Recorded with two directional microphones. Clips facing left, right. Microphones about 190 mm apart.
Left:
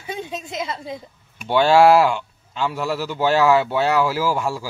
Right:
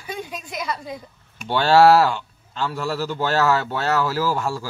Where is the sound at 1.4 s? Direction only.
10° left (ahead or behind).